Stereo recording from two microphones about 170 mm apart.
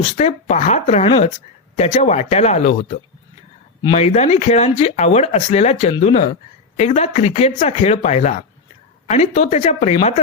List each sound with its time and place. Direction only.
0.0 s speech: 40° left (ahead or behind)